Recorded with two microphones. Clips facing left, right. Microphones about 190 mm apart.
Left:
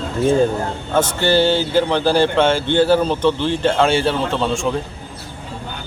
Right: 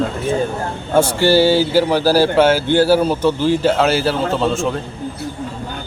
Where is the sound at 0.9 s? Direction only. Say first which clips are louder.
Right 3 dB; 10° right (ahead or behind).